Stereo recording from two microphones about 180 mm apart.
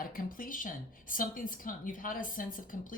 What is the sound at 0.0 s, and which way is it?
Speech, 50° left (ahead or behind).